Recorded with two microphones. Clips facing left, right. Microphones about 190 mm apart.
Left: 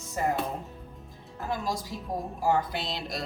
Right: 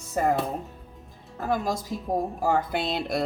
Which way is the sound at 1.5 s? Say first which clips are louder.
Right 5 dB; 50° right (ahead or behind).